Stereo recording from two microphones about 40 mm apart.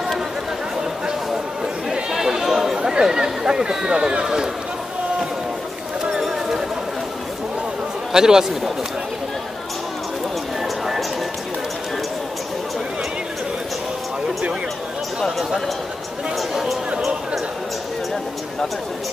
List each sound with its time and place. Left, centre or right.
1.9 s a sound: centre
8.1 s speech: centre
16.3 s music: centre